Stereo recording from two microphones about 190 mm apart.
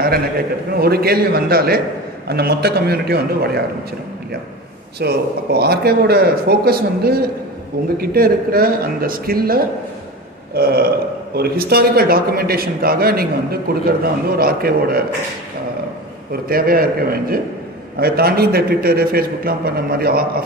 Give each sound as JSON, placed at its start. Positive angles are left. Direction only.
{"t": 0.7, "sound": "a man's voice", "side_deg": -55}
{"t": 5.0, "sound": "a man's voice", "side_deg": -55}
{"t": 16.4, "sound": "a man's voice", "side_deg": -50}